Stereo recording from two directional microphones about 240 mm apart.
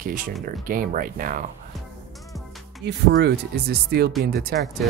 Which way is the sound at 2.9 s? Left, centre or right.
Right.